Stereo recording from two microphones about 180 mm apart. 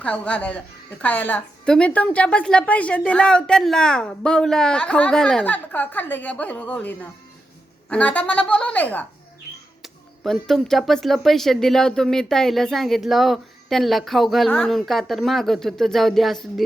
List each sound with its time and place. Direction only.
0.0 s a woman's voice: 5° left (ahead or behind)